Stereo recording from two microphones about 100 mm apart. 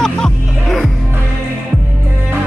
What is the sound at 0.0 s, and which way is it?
Music, 5° left (ahead or behind).